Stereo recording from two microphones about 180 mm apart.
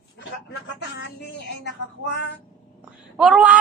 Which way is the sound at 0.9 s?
75° left (ahead or behind).